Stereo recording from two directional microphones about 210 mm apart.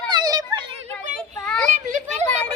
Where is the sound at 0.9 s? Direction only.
5° left (ahead or behind).